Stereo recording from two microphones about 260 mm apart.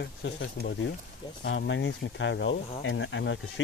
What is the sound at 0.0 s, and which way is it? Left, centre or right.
Speech, left.